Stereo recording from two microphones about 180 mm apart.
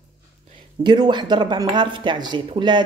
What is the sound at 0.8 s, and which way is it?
Speech, 25° right (ahead or behind).